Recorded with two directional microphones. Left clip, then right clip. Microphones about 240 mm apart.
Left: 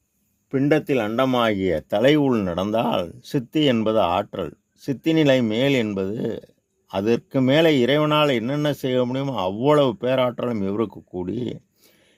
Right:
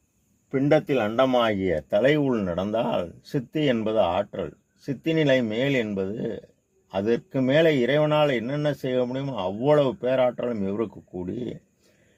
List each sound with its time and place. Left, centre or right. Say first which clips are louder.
0.5 s speech: left 1 dB; left